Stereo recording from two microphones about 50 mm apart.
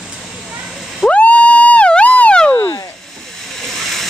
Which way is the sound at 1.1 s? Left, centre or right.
Left.